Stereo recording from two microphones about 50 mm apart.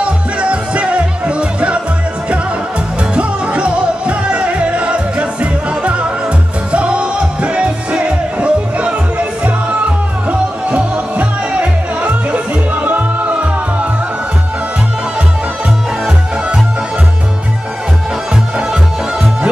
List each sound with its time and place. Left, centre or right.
0.0 s music: right
3.2 s music: right
10.7 s music: right